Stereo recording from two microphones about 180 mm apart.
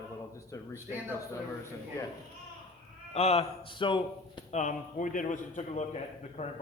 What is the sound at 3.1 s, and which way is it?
A man's voice, 35° left (ahead or behind).